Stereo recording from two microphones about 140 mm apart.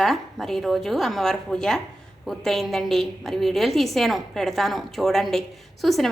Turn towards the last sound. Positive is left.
turn(degrees=0)  # may be behind; listen again after turning